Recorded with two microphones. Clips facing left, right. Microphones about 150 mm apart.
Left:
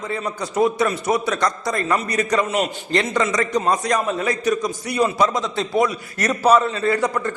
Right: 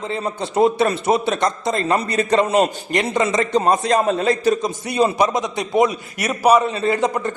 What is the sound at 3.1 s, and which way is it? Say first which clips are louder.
A man's voice: right 5 dB; 20° right (ahead or behind).